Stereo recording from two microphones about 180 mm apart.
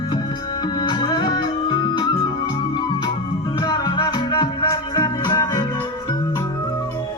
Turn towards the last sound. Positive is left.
turn(degrees=25)  # may be behind; listen again after turning